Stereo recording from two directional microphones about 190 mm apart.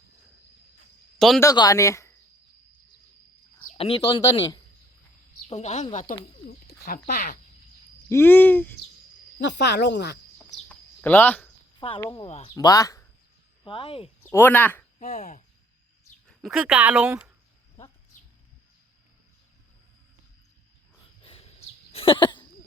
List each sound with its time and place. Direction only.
1.4 s speech: 20° left (ahead or behind)
3.8 s speech: 30° left (ahead or behind)
5.5 s speech: 35° left (ahead or behind)
6.5 s speech: 55° left (ahead or behind)
8.1 s speech: 10° left (ahead or behind)
9.4 s speech: 65° left (ahead or behind)
10.7 s a sound: 10° left (ahead or behind)
11.9 s speech: 25° left (ahead or behind)
12.5 s speech: 20° left (ahead or behind)
13.7 s speech: 30° left (ahead or behind)
14.2 s speech: 10° left (ahead or behind)
14.9 s speech: 35° left (ahead or behind)
16.2 s speech: centre (ahead or behind)
21.2 s a sound: 30° left (ahead or behind)